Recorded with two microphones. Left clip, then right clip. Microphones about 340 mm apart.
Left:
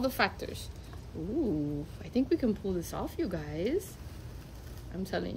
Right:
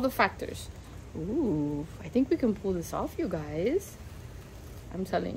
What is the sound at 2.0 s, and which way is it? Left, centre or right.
Speech, centre.